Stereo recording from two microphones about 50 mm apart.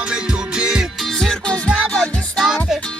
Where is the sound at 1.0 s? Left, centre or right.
Centre.